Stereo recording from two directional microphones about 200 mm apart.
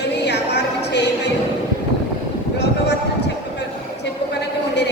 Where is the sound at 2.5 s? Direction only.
60° left (ahead or behind).